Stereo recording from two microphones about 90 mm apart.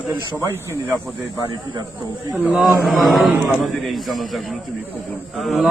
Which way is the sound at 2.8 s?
Centre (ahead or behind).